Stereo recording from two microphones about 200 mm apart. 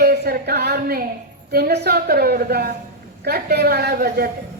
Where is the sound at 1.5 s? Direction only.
50° right (ahead or behind).